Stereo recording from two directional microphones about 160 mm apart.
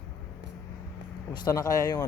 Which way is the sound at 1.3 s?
25° left (ahead or behind).